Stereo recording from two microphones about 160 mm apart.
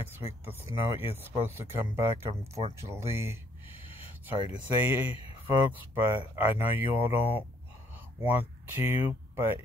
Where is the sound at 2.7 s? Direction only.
15° right (ahead or behind).